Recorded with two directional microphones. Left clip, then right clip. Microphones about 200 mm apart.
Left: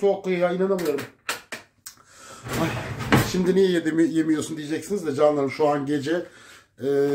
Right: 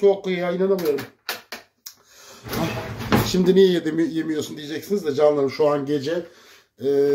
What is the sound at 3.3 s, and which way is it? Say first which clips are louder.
A man's voice: right 4 dB; 20° right (ahead or behind).